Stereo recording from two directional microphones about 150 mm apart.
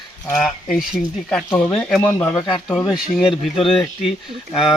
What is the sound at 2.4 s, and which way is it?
Speech, 35° left (ahead or behind).